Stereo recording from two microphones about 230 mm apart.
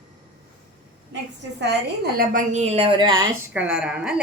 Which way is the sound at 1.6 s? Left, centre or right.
Right.